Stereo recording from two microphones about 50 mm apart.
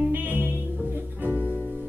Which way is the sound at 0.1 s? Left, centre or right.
Right.